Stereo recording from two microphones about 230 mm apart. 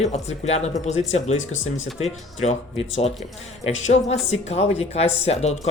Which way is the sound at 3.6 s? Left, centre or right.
Left.